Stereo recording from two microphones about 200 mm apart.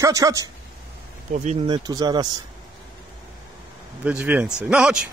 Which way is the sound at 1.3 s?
35° right (ahead or behind).